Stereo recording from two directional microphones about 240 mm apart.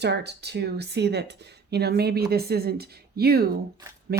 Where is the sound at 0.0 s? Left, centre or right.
Right.